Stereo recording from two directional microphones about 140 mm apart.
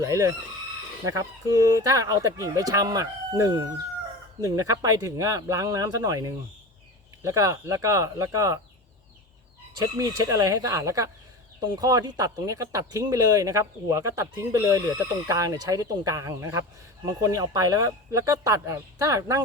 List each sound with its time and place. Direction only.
0.0 s speech: 20° right (ahead or behind)
10.0 s speech: 25° right (ahead or behind)